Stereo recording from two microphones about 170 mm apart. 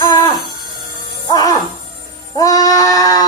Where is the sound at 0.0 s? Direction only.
25° left (ahead or behind).